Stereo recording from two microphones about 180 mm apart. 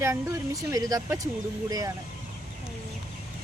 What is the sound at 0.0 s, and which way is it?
Speech, 15° right (ahead or behind).